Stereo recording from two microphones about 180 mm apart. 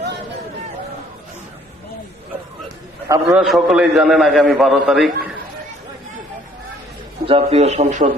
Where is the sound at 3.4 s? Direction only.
Centre (ahead or behind).